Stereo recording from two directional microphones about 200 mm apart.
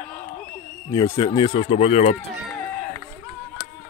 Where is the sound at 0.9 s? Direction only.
15° left (ahead or behind); by 2.3 s 35° left (ahead or behind).